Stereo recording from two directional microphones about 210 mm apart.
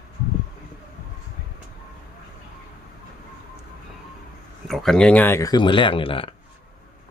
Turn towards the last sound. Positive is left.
turn(degrees=25)  # may be behind; listen again after turning